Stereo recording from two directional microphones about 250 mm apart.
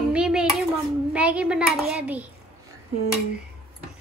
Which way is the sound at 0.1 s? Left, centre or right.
Centre.